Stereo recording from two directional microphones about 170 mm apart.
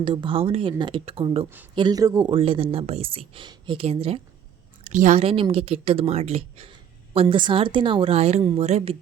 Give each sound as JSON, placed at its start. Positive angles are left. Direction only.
{"t": 0.0, "sound": "speech", "side_deg": -30}
{"t": 4.8, "sound": "speech", "side_deg": -45}